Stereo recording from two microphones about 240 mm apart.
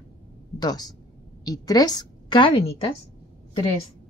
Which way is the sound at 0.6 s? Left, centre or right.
Centre.